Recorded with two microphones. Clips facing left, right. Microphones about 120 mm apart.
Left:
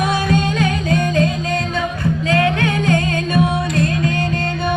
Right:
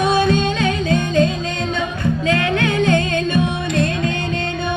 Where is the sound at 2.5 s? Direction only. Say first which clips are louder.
Right 1 dB; 25° right (ahead or behind).